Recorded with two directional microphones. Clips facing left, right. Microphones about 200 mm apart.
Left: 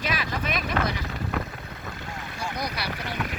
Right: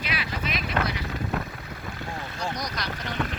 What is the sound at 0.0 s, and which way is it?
Boat, 45° left (ahead or behind).